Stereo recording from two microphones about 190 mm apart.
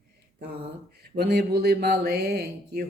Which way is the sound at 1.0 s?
60° right (ahead or behind).